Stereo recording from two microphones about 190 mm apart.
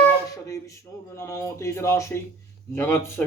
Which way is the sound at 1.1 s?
15° left (ahead or behind).